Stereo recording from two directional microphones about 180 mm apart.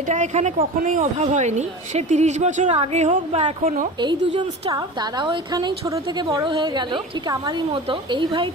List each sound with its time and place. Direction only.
0.1 s a woman's voice: 40° right (ahead or behind)